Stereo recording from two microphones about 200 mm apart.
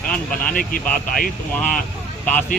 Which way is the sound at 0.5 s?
45° left (ahead or behind).